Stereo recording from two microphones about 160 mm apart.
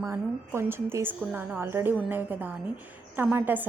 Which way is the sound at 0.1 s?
15° right (ahead or behind).